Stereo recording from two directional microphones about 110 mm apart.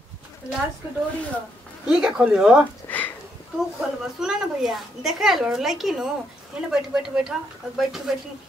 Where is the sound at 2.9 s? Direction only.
15° left (ahead or behind).